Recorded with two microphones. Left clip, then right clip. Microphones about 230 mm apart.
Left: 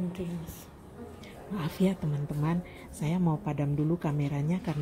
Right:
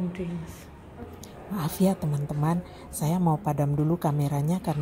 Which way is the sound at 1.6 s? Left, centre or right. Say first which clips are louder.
Right 4 dB; right.